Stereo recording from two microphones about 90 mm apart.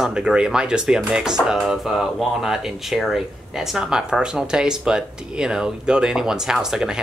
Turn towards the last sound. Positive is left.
turn(degrees=-5)  # may be behind; listen again after turning